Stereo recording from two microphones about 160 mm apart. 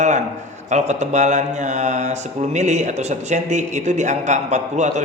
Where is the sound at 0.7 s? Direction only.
45° right (ahead or behind).